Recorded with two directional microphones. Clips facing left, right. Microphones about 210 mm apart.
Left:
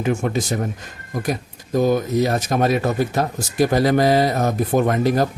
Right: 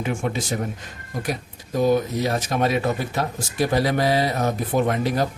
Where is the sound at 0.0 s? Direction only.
45° left (ahead or behind).